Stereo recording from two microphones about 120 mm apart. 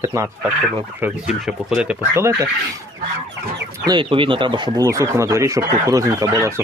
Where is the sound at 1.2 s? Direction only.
5° right (ahead or behind).